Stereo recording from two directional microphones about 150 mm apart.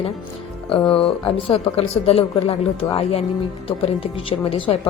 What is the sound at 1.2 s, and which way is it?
A woman's voice, 40° left (ahead or behind).